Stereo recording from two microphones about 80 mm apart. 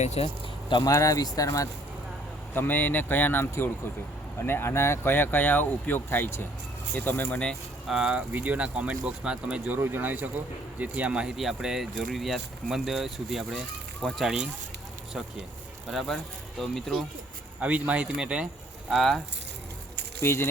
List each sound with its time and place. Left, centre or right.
0.9 s speech: left
2.5 s speech: left
7.9 s speech: centre
8.3 s speech: right
9.7 s speech: right; by 14.5 s centre
15.9 s speech: centre
17.6 s speech: centre
18.9 s speech: centre
20.2 s speech: left